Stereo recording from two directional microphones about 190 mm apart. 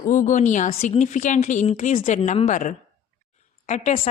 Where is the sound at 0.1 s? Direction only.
40° left (ahead or behind).